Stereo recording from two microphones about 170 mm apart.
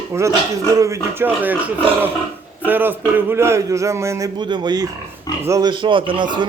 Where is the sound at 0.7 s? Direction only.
20° right (ahead or behind).